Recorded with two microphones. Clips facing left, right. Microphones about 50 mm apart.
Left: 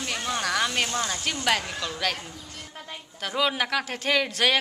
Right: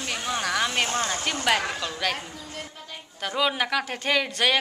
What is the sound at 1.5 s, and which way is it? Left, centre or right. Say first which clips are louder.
Speech: right 2 dB; centre.